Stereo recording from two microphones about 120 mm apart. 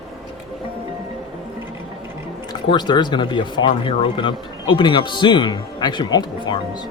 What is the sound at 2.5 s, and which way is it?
Speech, 35° left (ahead or behind).